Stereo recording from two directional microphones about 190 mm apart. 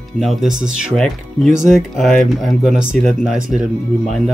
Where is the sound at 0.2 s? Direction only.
Centre (ahead or behind).